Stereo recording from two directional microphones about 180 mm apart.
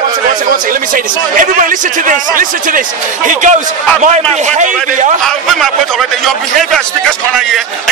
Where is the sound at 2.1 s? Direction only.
45° right (ahead or behind).